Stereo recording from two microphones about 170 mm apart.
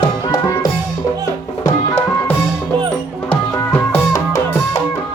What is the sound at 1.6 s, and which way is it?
Music, 15° left (ahead or behind).